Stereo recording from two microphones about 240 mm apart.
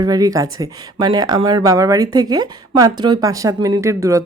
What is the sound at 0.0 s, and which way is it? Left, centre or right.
Speech, centre.